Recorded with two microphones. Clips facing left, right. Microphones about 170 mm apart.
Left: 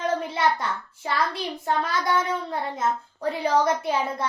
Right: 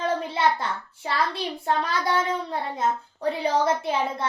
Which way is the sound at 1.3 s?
30° right (ahead or behind).